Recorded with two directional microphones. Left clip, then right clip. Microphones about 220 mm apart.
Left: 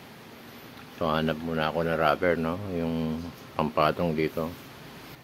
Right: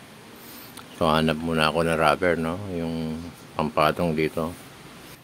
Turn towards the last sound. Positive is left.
turn(degrees=-20)  # may be behind; listen again after turning